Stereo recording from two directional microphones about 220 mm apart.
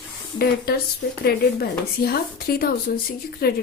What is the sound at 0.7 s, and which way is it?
Speech, 45° left (ahead or behind).